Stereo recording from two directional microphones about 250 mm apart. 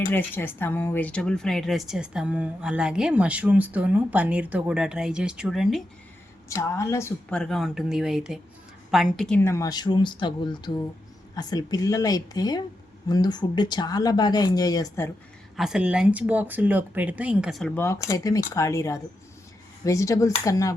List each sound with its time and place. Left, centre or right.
0.1 s speech: centre
6.5 s speech: centre
15.5 s speech: centre